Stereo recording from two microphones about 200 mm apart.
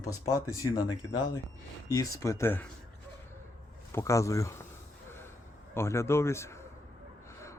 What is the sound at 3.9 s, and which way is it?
Speech, 15° left (ahead or behind).